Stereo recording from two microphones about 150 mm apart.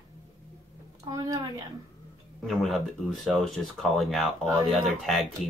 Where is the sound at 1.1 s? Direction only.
25° right (ahead or behind).